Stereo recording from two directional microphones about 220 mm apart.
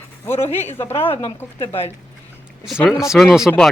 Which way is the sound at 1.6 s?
25° left (ahead or behind).